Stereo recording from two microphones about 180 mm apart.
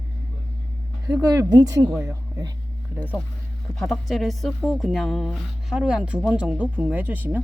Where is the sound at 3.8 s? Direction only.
Centre (ahead or behind).